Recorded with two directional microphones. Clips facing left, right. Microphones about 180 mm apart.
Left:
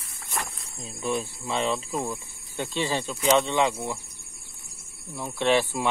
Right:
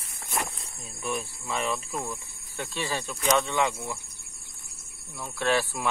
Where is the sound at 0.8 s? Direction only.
20° left (ahead or behind).